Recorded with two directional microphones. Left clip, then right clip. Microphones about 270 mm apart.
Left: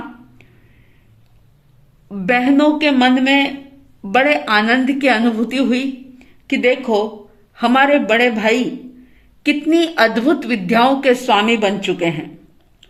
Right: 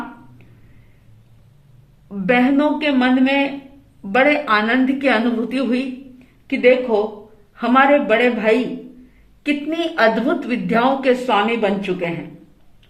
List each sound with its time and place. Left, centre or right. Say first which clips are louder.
2.0 s a woman's voice: left 1 dB; left